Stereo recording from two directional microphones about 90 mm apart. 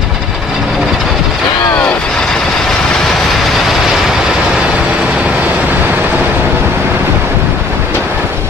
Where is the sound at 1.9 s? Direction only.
10° left (ahead or behind); by 7.1 s 25° right (ahead or behind).